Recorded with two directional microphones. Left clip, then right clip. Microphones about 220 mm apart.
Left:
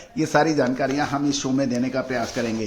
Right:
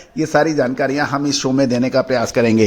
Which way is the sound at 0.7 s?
40° right (ahead or behind).